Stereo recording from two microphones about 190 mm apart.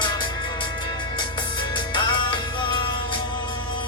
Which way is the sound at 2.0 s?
25° left (ahead or behind).